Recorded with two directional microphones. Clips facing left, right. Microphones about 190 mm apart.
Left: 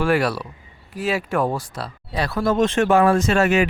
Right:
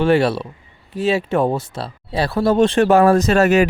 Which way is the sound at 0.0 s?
25° right (ahead or behind).